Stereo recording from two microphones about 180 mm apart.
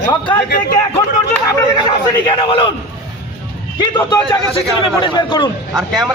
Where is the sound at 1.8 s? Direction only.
30° left (ahead or behind).